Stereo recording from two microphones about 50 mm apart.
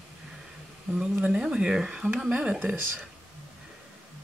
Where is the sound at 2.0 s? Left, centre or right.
Right.